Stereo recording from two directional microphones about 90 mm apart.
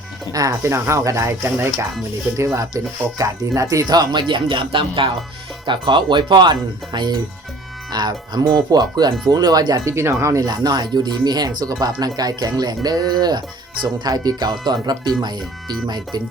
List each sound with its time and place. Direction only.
0.6 s speech: 30° right (ahead or behind); by 5.1 s 75° right (ahead or behind)
5.6 s speech: 60° right (ahead or behind); by 9.8 s 45° right (ahead or behind)
9.8 s speech: 30° right (ahead or behind)
10.4 s speech: 50° right (ahead or behind)